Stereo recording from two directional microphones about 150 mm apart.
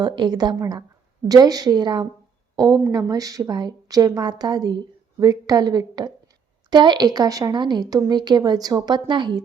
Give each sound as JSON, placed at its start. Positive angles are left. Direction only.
{"t": 0.0, "sound": "a woman's voice", "side_deg": -30}